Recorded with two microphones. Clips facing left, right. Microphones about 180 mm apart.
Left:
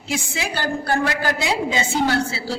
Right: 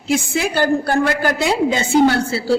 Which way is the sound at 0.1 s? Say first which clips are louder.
Right 8 dB; 50° right (ahead or behind).